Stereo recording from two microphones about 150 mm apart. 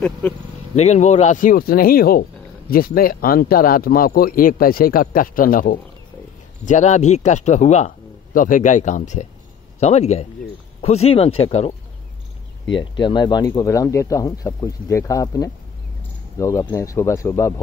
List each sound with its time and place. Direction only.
0.2 s speech: 10° left (ahead or behind)
0.7 s speech: 50° left (ahead or behind); by 5.8 s 70° left (ahead or behind)
6.6 s speech: 55° left (ahead or behind)
12.9 s speech: 30° left (ahead or behind)